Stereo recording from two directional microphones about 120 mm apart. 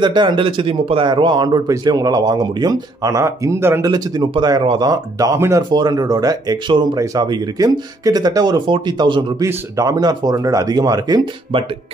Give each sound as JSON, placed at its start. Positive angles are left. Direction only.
{"t": 0.0, "sound": "speech", "side_deg": -40}
{"t": 3.8, "sound": "speech", "side_deg": -35}
{"t": 5.6, "sound": "speech", "side_deg": -35}
{"t": 9.4, "sound": "speech", "side_deg": -25}